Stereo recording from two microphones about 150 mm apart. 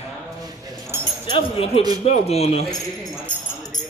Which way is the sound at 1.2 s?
40° left (ahead or behind).